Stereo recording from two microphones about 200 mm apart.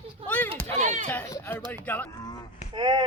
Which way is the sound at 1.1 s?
10° left (ahead or behind).